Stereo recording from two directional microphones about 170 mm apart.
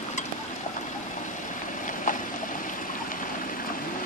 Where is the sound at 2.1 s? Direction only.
50° left (ahead or behind).